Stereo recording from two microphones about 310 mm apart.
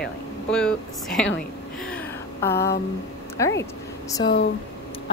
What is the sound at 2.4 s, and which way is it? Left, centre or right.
A woman's voice, centre.